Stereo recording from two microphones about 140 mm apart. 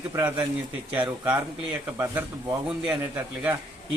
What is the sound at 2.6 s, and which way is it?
Speech, 10° right (ahead or behind).